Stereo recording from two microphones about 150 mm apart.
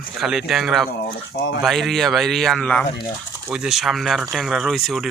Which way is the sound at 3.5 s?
5° right (ahead or behind).